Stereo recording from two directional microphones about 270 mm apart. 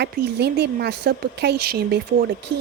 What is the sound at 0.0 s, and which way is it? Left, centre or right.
Speech, right.